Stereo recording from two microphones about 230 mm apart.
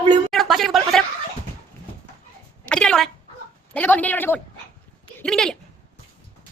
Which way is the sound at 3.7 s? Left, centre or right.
Centre.